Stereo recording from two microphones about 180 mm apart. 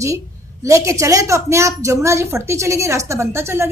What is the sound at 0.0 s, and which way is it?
A woman's voice, 15° right (ahead or behind).